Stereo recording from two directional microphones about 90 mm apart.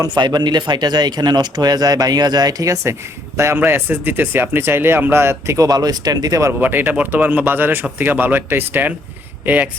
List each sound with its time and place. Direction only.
0.2 s speech: 55° right (ahead or behind)
6.6 s speech: 20° right (ahead or behind)